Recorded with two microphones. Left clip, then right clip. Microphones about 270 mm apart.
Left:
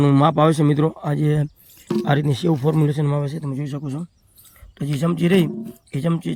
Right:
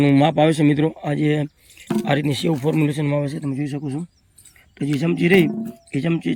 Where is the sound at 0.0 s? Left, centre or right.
Centre.